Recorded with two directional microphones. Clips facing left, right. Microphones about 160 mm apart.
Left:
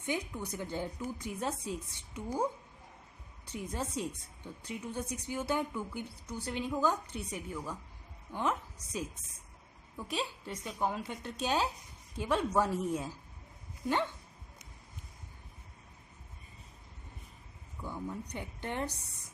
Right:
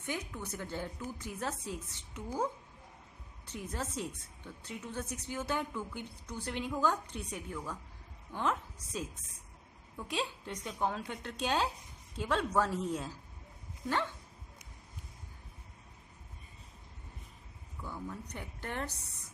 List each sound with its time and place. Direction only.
0.0 s a woman's voice: 15° left (ahead or behind)
17.8 s a woman's voice: 15° left (ahead or behind)